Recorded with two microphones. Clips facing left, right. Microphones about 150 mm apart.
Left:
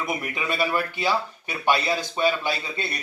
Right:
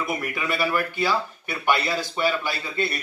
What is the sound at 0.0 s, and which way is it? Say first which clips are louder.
A man's voice: right 1 dB; 20° left (ahead or behind).